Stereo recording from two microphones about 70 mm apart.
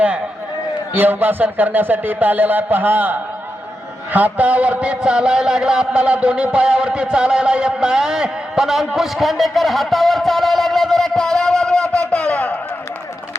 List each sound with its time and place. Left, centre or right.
0.9 s a man's voice: right; by 12.5 s centre